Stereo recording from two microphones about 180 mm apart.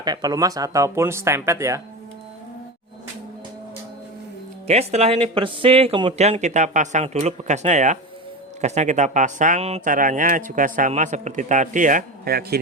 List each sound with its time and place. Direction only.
0.0 s speech: 20° right (ahead or behind)
4.6 s speech: 35° right (ahead or behind); by 12.5 s 60° right (ahead or behind)